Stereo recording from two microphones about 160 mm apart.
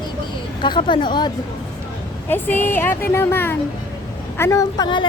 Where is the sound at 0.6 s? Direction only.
30° left (ahead or behind).